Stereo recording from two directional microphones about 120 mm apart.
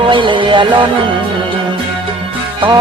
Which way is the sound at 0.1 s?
45° right (ahead or behind).